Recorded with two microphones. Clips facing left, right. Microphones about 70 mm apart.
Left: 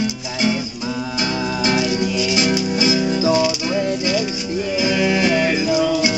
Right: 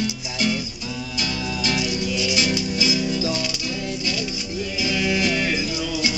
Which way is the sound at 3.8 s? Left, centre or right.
Left.